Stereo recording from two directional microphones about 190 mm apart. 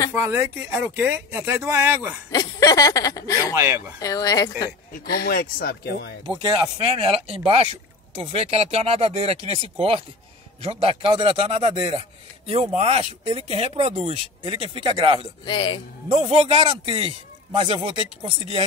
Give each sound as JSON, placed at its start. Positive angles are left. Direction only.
{"t": 0.1, "sound": "speech", "side_deg": -10}
{"t": 2.3, "sound": "speech", "side_deg": 20}
{"t": 3.5, "sound": "speech", "side_deg": -15}
{"t": 4.0, "sound": "speech", "side_deg": 20}
{"t": 5.2, "sound": "speech", "side_deg": 55}
{"t": 6.4, "sound": "speech", "side_deg": -25}
{"t": 15.4, "sound": "speech", "side_deg": 25}
{"t": 16.1, "sound": "speech", "side_deg": -30}